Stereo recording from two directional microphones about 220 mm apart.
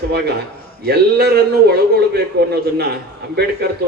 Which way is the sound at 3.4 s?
50° right (ahead or behind).